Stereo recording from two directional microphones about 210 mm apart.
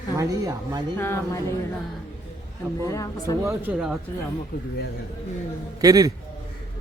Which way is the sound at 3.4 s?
10° right (ahead or behind).